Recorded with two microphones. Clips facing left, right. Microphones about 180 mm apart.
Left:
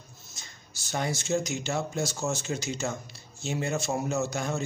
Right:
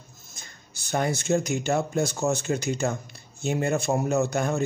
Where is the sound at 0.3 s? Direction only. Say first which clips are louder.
Right 2 dB; 55° right (ahead or behind).